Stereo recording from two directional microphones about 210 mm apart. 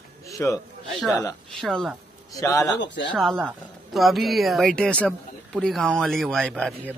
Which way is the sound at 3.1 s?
Centre (ahead or behind).